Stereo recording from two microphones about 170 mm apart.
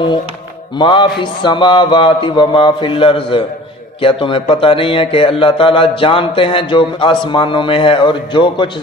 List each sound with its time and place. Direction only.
0.7 s a man's voice: 30° left (ahead or behind)